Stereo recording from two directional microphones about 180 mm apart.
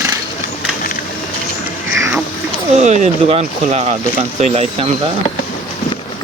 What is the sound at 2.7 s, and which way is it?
Speech, 40° right (ahead or behind).